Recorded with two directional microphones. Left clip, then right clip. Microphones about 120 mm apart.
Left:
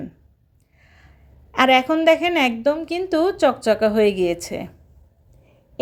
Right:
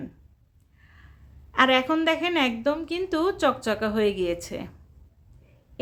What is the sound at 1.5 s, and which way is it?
A woman's voice, 30° left (ahead or behind).